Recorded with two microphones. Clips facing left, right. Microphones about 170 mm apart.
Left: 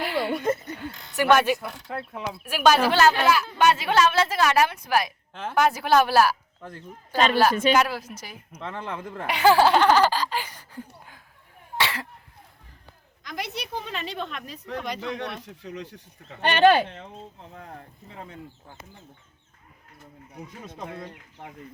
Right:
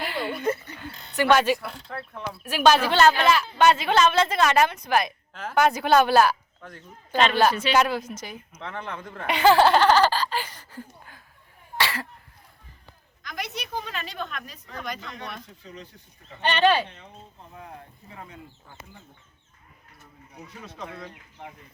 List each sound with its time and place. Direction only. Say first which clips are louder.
0.0 s a sound: left 4 dB; 10° left (ahead or behind)
0.3 s a sound: left 2 dB; 45° left (ahead or behind)
0.8 s a sound: even; 10° left (ahead or behind)
1.6 s speech: left 2 dB; 15° left (ahead or behind)
5.3 s speech: left 2 dB; 25° left (ahead or behind)
5.5 s speech: right 1 dB; 5° left (ahead or behind)
7.5 s speech: left 4 dB; 45° left (ahead or behind)
7.8 s speech: right 1 dB; 5° left (ahead or behind)
11.8 s sneeze: even; 20° left (ahead or behind)
13.3 s a woman's voice: left 1 dB; 25° left (ahead or behind)
15.0 s speech: left 6 dB; 75° left (ahead or behind)
16.4 s speech: left 3 dB; 55° left (ahead or behind)
20.8 s a woman's voice: left 1 dB; 25° left (ahead or behind)